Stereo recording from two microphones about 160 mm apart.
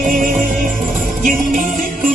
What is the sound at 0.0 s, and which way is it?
Music, 60° right (ahead or behind).